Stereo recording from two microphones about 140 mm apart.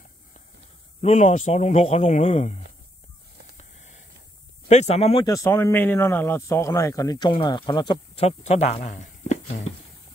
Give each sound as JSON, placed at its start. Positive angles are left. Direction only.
{"t": 1.0, "sound": "speech", "side_deg": 55}
{"t": 3.5, "sound": "a sound", "side_deg": 55}
{"t": 4.6, "sound": "speech", "side_deg": 50}
{"t": 5.2, "sound": "speech", "side_deg": 20}
{"t": 8.2, "sound": "speech", "side_deg": 50}